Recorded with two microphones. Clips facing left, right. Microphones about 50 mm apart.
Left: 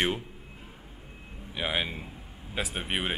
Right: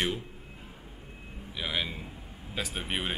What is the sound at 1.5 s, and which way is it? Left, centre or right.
Speech, left.